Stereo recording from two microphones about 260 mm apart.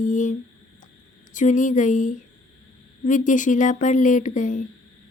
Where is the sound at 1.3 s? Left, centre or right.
Left.